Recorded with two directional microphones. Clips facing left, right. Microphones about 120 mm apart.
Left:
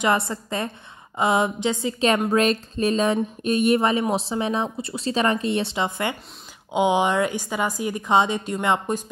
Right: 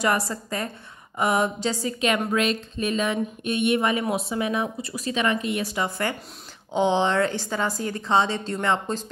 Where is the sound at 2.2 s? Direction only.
40° left (ahead or behind).